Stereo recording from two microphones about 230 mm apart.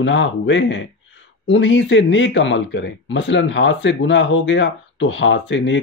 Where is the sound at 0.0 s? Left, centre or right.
Left.